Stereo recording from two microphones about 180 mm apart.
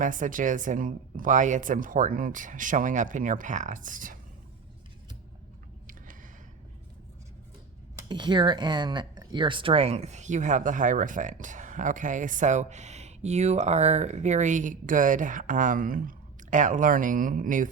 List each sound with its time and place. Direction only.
0.0 s speech: 45° right (ahead or behind)
8.0 s speech: 25° right (ahead or behind); by 17.7 s 45° right (ahead or behind)